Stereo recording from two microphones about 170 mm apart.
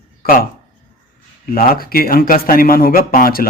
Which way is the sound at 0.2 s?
55° left (ahead or behind).